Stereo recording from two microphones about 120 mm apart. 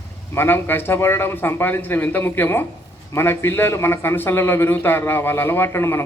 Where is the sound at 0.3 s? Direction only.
20° left (ahead or behind).